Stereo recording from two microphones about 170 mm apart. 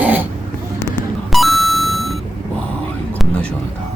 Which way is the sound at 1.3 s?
Centre (ahead or behind).